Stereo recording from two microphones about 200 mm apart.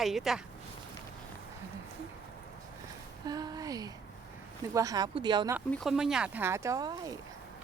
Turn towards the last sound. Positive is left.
turn(degrees=-20)  # may be behind; listen again after turning